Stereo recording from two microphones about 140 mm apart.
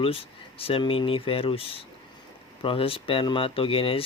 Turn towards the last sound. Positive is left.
turn(degrees=40)  # may be behind; listen again after turning